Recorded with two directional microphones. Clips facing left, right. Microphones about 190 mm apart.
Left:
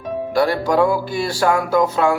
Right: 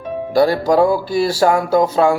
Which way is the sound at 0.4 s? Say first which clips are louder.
Right 3 dB; 35° right (ahead or behind).